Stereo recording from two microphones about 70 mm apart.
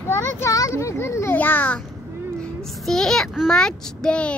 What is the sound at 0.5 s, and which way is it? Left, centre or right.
Speech, left.